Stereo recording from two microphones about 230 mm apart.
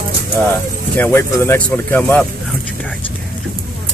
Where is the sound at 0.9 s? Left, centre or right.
Centre.